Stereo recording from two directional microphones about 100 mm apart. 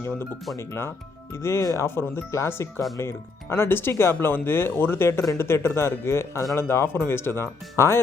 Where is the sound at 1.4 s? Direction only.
25° left (ahead or behind).